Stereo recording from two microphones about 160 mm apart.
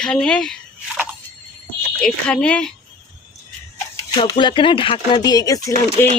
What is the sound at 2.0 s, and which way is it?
Speech, 5° left (ahead or behind).